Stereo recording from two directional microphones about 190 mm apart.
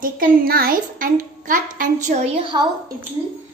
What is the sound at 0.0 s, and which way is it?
A child's voice, 50° right (ahead or behind).